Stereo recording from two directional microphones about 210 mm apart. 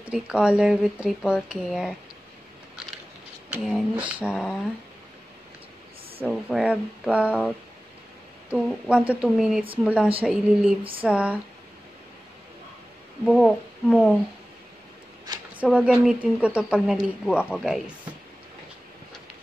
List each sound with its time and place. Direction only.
0.0 s speech: 5° right (ahead or behind)
3.5 s speech: 5° right (ahead or behind)
6.2 s speech: 5° right (ahead or behind)
13.2 s speech: centre (ahead or behind)
15.5 s speech: 5° right (ahead or behind)